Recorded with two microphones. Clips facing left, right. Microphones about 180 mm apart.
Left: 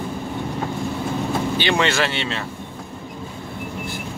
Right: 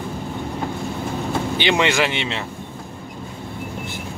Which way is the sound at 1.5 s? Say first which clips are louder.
Right 3 dB; 15° right (ahead or behind).